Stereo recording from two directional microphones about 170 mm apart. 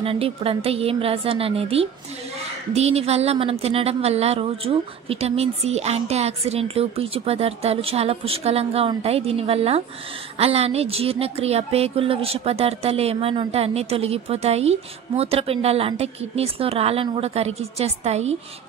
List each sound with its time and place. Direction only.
0.0 s a woman's voice: 35° right (ahead or behind)